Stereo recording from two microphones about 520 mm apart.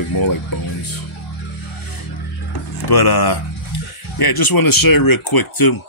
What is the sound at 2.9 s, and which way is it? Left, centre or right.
A man's voice, left.